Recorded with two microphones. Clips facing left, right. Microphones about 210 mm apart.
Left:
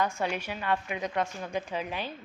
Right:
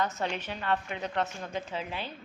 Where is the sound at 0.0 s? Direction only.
10° left (ahead or behind).